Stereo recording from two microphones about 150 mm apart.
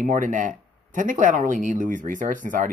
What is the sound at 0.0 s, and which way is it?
A man's voice, 60° right (ahead or behind).